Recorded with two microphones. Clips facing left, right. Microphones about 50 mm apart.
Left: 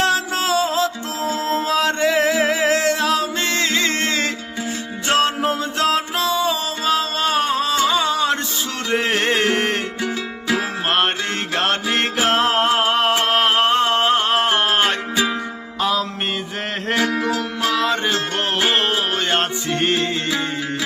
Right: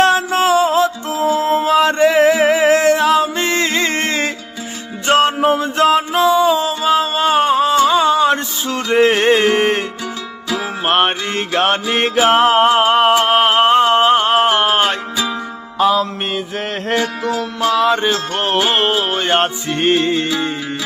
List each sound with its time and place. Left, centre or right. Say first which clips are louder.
0.0 s music: right 6 dB; right
10.8 s music: right 6 dB; right
15.8 s music: right 6 dB; centre
17.8 s music: right 4 dB; centre